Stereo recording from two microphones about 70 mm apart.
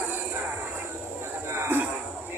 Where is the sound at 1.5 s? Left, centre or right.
Right.